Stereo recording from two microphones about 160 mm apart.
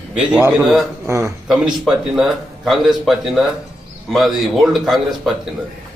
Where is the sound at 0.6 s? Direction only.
Centre (ahead or behind).